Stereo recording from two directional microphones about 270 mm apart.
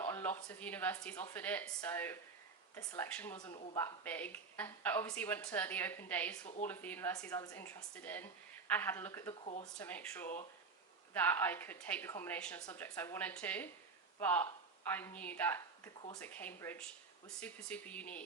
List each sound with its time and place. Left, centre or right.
0.0 s a woman's voice: centre
9.4 s speech: left
9.7 s a woman's voice: centre